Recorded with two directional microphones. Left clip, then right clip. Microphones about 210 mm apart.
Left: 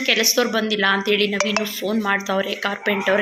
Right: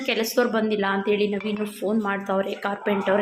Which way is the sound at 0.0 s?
10° right (ahead or behind).